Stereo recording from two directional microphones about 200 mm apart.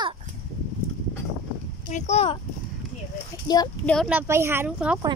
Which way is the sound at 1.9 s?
35° left (ahead or behind).